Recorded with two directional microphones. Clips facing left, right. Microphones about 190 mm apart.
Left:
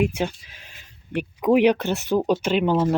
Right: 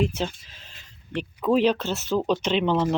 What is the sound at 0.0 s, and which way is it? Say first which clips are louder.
Speech: left 3 dB; 10° left (ahead or behind).